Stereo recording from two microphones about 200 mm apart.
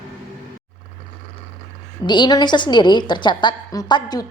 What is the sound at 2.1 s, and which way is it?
A woman's voice, 20° left (ahead or behind).